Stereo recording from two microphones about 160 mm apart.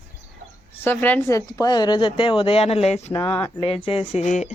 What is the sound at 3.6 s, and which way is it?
Speech, 35° left (ahead or behind).